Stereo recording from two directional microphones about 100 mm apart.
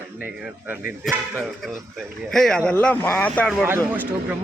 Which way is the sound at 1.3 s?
5° right (ahead or behind).